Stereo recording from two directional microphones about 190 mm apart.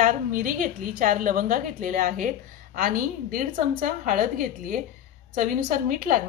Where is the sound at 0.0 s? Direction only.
45° right (ahead or behind).